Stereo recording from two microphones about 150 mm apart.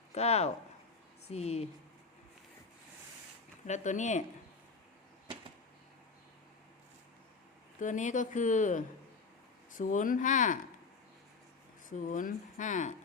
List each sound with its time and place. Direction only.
0.1 s speech: 45° left (ahead or behind)
3.7 s speech: 50° left (ahead or behind)
7.8 s speech: 55° left (ahead or behind)
11.9 s speech: 60° left (ahead or behind)